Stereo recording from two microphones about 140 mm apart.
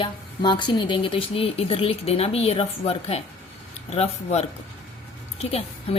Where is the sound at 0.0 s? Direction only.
35° left (ahead or behind).